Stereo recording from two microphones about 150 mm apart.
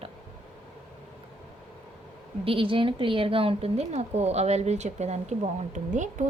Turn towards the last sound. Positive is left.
turn(degrees=-55)  # may be behind; listen again after turning